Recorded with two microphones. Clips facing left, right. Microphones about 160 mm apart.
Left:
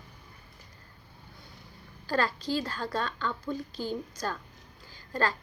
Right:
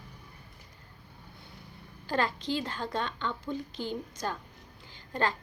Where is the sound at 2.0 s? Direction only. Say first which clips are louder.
Left 1 dB; 20° right (ahead or behind).